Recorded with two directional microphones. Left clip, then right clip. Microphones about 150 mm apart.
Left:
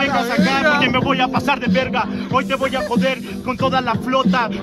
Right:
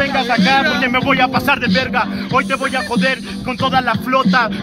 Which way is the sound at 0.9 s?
20° right (ahead or behind).